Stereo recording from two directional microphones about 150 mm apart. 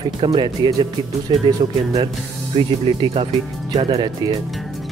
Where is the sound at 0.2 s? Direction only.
35° right (ahead or behind).